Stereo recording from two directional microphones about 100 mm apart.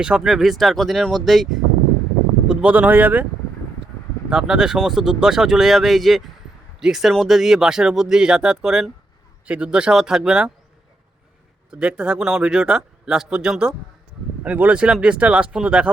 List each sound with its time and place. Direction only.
0.0 s speech: 5° right (ahead or behind)
4.3 s speech: 5° right (ahead or behind)
11.7 s speech: 10° right (ahead or behind)